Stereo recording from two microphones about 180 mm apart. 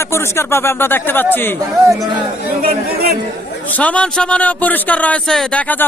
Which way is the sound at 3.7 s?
5° left (ahead or behind).